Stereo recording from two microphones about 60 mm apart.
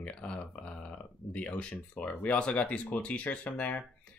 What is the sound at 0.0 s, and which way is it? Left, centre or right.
Speech, centre.